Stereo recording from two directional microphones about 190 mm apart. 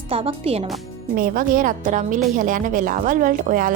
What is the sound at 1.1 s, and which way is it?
A woman's voice, 45° right (ahead or behind).